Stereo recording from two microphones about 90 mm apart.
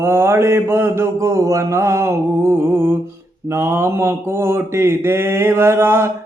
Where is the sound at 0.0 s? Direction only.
30° right (ahead or behind).